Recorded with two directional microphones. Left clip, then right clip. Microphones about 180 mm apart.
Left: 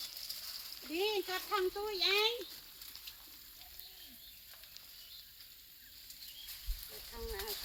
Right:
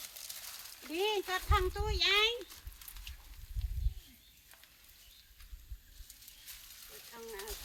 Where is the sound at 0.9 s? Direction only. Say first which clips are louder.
Right 2 dB; 45° right (ahead or behind).